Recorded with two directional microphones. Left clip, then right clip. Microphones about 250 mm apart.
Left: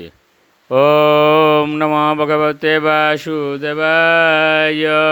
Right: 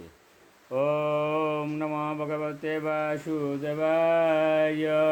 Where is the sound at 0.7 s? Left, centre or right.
Left.